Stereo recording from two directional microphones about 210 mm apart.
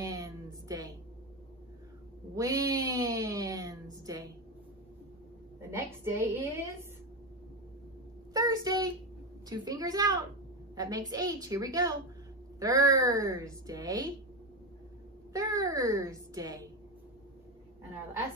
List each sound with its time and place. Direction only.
0.0 s a sound: 15° right (ahead or behind)
2.3 s a sound: 15° right (ahead or behind)
5.6 s a woman's voice: 10° right (ahead or behind)
8.3 s child singing: 15° right (ahead or behind)
9.5 s a woman's voice: 15° right (ahead or behind)
15.3 s a woman's voice: 15° right (ahead or behind)